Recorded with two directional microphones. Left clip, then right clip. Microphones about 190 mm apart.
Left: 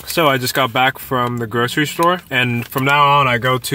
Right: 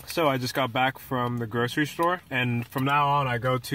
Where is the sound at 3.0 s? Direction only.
30° left (ahead or behind).